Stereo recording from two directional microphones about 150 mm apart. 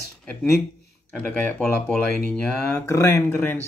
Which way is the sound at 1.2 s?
10° left (ahead or behind).